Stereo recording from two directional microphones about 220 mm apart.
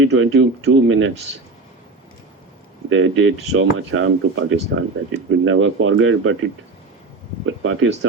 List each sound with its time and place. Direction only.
0.0 s speech: 65° right (ahead or behind)
2.9 s speech: 65° right (ahead or behind)
7.4 s speech: 65° right (ahead or behind)